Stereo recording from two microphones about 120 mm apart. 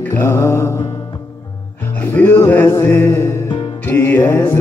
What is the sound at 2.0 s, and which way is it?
Music, 15° left (ahead or behind).